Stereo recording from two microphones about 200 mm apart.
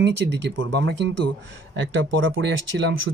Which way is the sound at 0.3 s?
60° right (ahead or behind).